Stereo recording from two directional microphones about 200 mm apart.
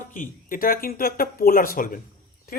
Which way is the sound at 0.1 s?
40° left (ahead or behind).